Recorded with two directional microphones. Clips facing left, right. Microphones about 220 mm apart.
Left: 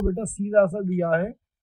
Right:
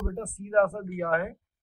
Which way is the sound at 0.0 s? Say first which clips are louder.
Left 9 dB; 35° left (ahead or behind).